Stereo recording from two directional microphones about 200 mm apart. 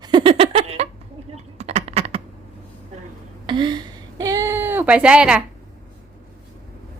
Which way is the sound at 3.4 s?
25° right (ahead or behind).